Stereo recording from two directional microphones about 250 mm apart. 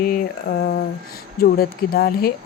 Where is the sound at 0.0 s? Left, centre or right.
Left.